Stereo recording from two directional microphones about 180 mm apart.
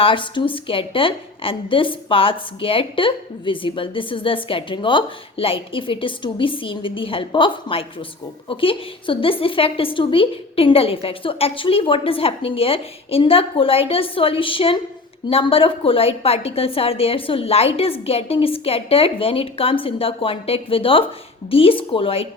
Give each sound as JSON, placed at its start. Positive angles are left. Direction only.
{"t": 0.0, "sound": "a woman's voice", "side_deg": 30}